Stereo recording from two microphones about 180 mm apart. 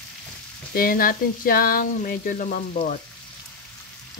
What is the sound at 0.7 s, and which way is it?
Speech, 55° left (ahead or behind).